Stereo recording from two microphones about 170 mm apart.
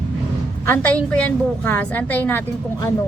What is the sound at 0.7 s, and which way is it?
A woman's voice, 10° left (ahead or behind).